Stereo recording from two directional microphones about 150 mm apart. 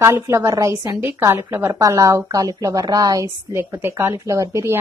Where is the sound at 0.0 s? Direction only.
20° right (ahead or behind).